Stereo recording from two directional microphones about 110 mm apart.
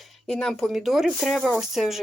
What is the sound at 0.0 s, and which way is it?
Speech, 5° left (ahead or behind).